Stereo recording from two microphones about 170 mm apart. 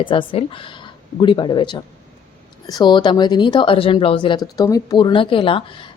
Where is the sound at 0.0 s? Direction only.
30° left (ahead or behind).